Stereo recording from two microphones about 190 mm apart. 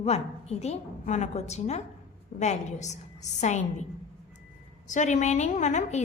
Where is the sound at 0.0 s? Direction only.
35° left (ahead or behind).